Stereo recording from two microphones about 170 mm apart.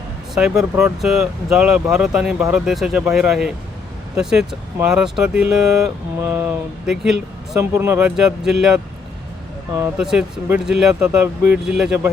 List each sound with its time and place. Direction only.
0.3 s speech: 5° right (ahead or behind)
7.6 s speech: 15° right (ahead or behind)
10.0 s speech: 5° right (ahead or behind)